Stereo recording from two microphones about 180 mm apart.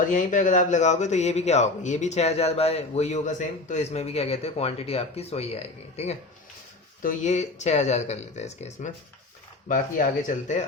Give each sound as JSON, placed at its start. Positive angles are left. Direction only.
{"t": 0.1, "sound": "speech", "side_deg": 45}